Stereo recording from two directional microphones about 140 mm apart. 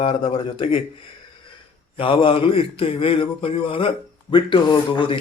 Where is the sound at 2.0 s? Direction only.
40° left (ahead or behind).